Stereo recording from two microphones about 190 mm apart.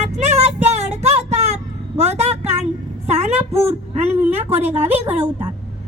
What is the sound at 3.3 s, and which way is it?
Speech, 10° right (ahead or behind).